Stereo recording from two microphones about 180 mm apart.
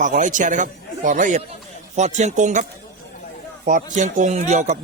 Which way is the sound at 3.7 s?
45° right (ahead or behind).